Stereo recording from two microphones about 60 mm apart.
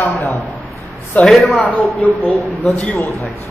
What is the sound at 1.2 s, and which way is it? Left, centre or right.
Speech, centre.